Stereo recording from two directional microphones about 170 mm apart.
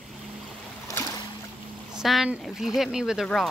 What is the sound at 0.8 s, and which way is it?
Boat, 20° left (ahead or behind).